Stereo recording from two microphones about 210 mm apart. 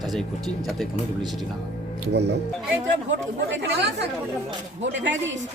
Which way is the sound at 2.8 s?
60° right (ahead or behind).